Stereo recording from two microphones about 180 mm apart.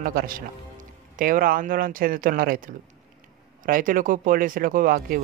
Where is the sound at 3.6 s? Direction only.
50° right (ahead or behind).